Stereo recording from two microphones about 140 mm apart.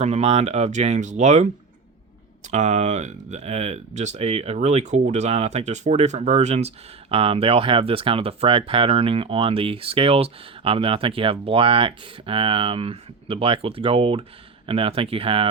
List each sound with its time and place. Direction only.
0.0 s speech: 50° right (ahead or behind)
2.5 s speech: 55° right (ahead or behind); by 15.4 s 40° right (ahead or behind)